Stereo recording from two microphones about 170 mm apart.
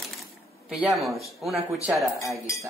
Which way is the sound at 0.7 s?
Centre (ahead or behind).